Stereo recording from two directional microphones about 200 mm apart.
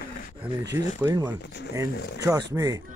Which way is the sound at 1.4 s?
60° left (ahead or behind).